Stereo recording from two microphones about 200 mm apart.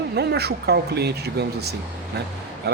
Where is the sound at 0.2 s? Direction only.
55° right (ahead or behind).